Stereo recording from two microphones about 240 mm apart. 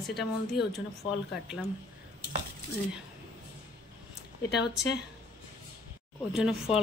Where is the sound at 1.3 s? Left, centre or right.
Left.